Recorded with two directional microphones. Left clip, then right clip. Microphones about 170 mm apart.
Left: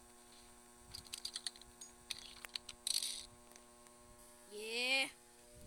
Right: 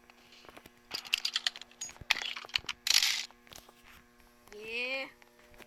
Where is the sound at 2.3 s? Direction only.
10° left (ahead or behind).